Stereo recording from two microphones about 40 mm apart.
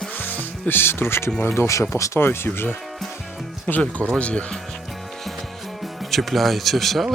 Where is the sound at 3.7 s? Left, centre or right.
Left.